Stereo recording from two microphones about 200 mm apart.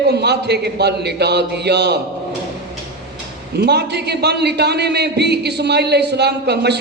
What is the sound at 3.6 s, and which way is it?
A man's voice, 55° right (ahead or behind).